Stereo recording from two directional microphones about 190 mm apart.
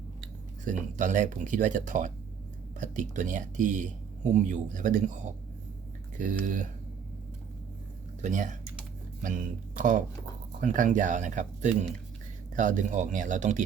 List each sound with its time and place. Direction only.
0.6 s speech: 40° right (ahead or behind)
6.4 s speech: 40° right (ahead or behind)
8.2 s speech: 40° right (ahead or behind)